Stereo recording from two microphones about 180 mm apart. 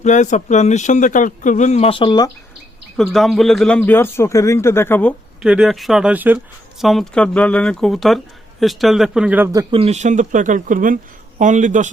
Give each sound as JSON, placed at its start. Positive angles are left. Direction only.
{"t": 0.0, "sound": "speech", "side_deg": 40}
{"t": 3.0, "sound": "speech", "side_deg": 0}
{"t": 5.4, "sound": "speech", "side_deg": -5}
{"t": 9.7, "sound": "speech", "side_deg": -35}